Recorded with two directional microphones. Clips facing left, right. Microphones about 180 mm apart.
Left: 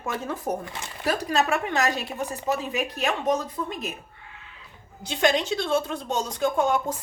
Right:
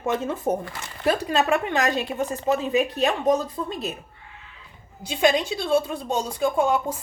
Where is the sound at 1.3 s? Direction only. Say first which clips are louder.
Right 2 dB; 30° right (ahead or behind).